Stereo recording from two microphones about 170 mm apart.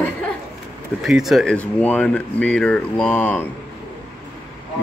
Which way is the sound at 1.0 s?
Centre (ahead or behind).